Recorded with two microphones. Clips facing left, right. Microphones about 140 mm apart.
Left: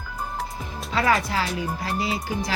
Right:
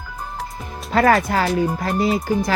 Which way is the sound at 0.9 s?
50° right (ahead or behind).